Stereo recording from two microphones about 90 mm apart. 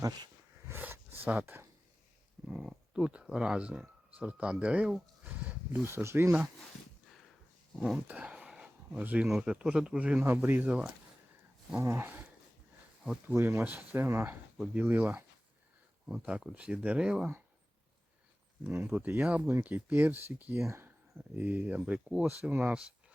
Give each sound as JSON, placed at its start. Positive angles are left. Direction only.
{"t": 0.7, "sound": "a sound", "side_deg": -20}
{"t": 2.5, "sound": "speech", "side_deg": -5}
{"t": 5.2, "sound": "a sound", "side_deg": -20}
{"t": 5.9, "sound": "speech", "side_deg": -30}
{"t": 8.0, "sound": "a sound", "side_deg": -15}
{"t": 9.2, "sound": "speech", "side_deg": -5}
{"t": 11.8, "sound": "speech", "side_deg": -30}
{"t": 13.2, "sound": "speech", "side_deg": -25}
{"t": 18.9, "sound": "speech", "side_deg": -20}